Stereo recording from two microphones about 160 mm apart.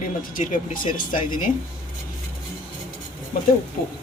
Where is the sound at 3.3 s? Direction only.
60° left (ahead or behind).